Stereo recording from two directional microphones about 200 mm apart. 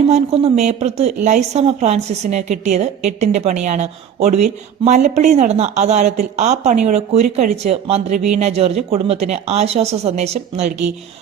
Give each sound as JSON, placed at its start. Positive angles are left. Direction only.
{"t": 0.1, "sound": "speech", "side_deg": -30}